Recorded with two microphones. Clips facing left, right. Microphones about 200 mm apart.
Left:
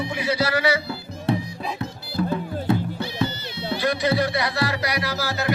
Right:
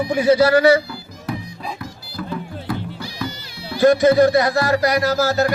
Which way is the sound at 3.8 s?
45° right (ahead or behind).